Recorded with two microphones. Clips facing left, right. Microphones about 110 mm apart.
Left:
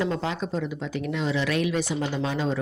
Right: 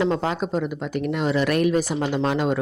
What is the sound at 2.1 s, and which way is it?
Speech, 60° right (ahead or behind).